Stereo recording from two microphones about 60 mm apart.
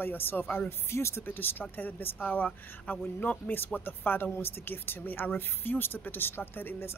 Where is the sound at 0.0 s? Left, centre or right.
Left.